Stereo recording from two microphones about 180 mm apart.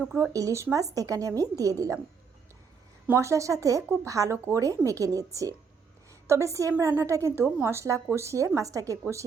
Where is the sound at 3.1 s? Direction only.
15° right (ahead or behind).